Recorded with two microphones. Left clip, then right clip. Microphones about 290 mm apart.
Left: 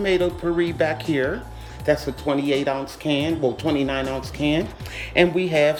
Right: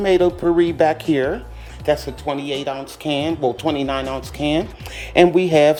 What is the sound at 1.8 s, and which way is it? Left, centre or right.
Speech, centre.